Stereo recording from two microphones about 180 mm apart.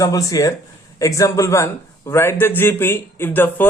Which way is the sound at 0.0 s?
20° left (ahead or behind).